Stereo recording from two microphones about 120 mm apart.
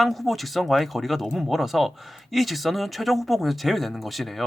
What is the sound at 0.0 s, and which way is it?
Speech, centre (ahead or behind).